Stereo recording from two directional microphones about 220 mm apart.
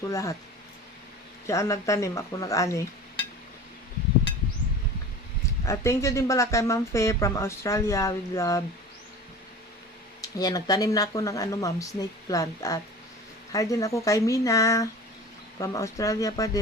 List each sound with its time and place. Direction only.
0.1 s speech: 15° left (ahead or behind)
1.5 s speech: 15° left (ahead or behind)
5.6 s speech: 15° left (ahead or behind)
10.2 s speech: 15° left (ahead or behind)